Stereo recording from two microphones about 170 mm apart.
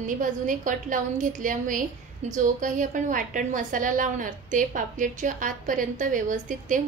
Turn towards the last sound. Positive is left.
turn(degrees=-50)  # may be behind; listen again after turning